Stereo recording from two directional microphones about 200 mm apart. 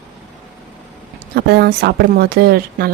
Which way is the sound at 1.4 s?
55° right (ahead or behind).